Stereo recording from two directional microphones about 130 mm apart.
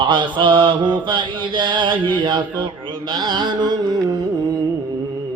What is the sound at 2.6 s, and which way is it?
Music, 40° right (ahead or behind).